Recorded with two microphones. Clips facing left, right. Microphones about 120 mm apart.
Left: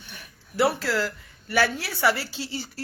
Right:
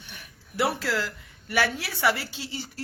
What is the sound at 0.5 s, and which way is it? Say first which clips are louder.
Speech: left 3 dB; 15° right (ahead or behind).